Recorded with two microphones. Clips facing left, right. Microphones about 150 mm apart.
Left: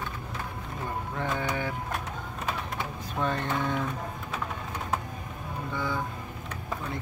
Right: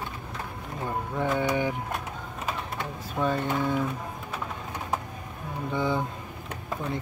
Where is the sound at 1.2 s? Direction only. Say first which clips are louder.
Right 5 dB; 15° right (ahead or behind).